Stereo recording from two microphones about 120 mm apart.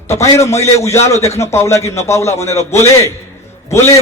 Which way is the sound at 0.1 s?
25° left (ahead or behind).